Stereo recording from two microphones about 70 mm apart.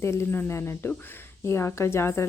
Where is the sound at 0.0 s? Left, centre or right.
Left.